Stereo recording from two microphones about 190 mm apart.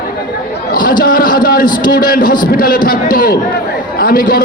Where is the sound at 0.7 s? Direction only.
45° left (ahead or behind).